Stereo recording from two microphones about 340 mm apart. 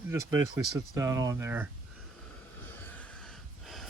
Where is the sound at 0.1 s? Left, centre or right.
Centre.